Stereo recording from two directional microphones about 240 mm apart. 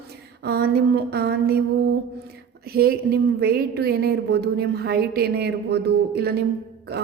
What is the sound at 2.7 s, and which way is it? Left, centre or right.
A woman's voice, right.